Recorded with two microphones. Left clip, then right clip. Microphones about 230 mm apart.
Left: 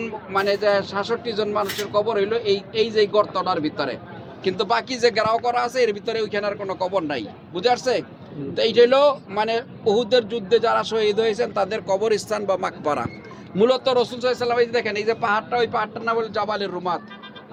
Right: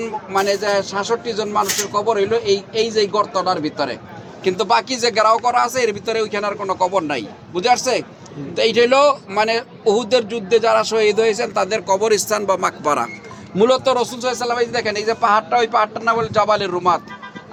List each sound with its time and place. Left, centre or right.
0.0 s speech: right